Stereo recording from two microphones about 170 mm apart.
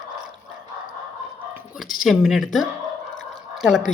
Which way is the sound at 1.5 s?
5° right (ahead or behind).